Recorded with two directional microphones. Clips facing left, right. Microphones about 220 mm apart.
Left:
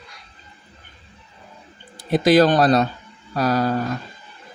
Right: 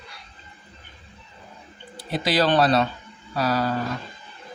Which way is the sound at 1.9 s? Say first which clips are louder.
Left 8 dB; 45° left (ahead or behind).